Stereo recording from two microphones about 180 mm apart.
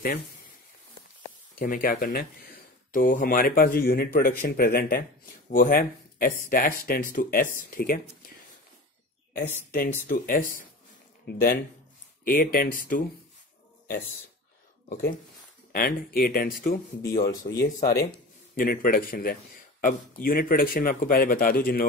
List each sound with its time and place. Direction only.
1.6 s speech: 50° left (ahead or behind)
9.3 s speech: 55° left (ahead or behind)
14.9 s speech: 50° left (ahead or behind)